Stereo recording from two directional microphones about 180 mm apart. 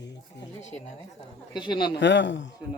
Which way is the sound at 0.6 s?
40° left (ahead or behind).